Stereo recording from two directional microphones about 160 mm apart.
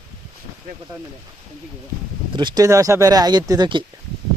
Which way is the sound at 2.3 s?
30° right (ahead or behind).